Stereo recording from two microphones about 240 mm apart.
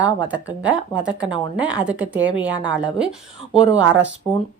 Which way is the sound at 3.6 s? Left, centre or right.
Right.